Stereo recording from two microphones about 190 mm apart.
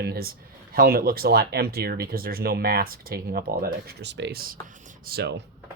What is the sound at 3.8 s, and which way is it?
Speech, 65° right (ahead or behind).